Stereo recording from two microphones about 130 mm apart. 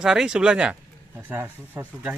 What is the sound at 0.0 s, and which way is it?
Speech, 5° right (ahead or behind).